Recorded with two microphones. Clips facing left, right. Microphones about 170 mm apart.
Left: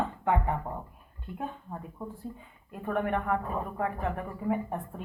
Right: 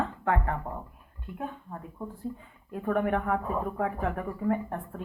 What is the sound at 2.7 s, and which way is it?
Speech, centre (ahead or behind).